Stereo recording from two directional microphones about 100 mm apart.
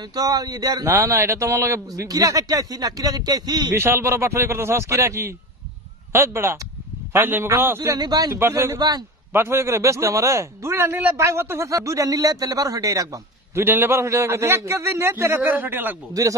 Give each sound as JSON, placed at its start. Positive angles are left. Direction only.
{"t": 0.1, "sound": "a man's voice", "side_deg": -40}
{"t": 0.9, "sound": "a man's voice", "side_deg": -25}
{"t": 3.7, "sound": "a man's voice", "side_deg": -25}
{"t": 7.9, "sound": "a man's voice", "side_deg": -40}
{"t": 8.4, "sound": "a man's voice", "side_deg": -25}
{"t": 13.7, "sound": "a man's voice", "side_deg": -20}
{"t": 16.1, "sound": "a man's voice", "side_deg": -35}